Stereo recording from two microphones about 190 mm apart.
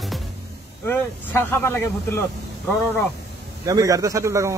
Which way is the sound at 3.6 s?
15° right (ahead or behind).